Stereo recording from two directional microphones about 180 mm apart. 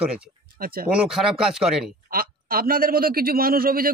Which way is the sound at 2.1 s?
55° right (ahead or behind).